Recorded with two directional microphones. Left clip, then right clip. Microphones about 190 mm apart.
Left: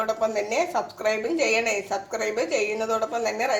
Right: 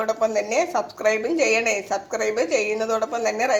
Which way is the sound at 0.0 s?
35° right (ahead or behind).